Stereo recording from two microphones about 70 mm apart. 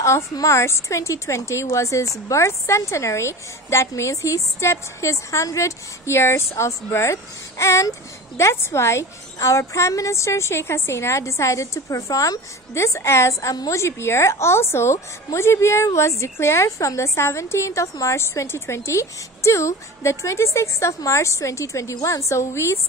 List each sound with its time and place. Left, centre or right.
0.0 s speech: left
12.7 s speech: left